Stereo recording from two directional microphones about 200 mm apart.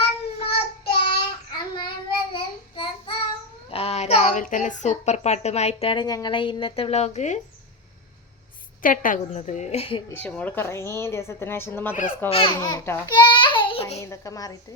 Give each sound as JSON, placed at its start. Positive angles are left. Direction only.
{"t": 0.0, "sound": "child singing", "side_deg": 30}
{"t": 3.7, "sound": "a woman's voice", "side_deg": 30}
{"t": 8.8, "sound": "a woman's voice", "side_deg": 40}
{"t": 10.1, "sound": "a woman's voice", "side_deg": 10}
{"t": 12.3, "sound": "a child's voice", "side_deg": 25}
{"t": 14.0, "sound": "a woman's voice", "side_deg": 15}